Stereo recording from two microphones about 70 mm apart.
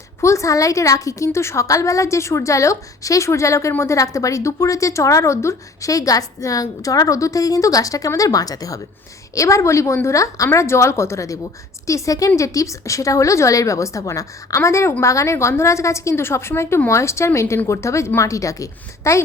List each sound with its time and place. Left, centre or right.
0.2 s a woman's voice: left
9.3 s a woman's voice: left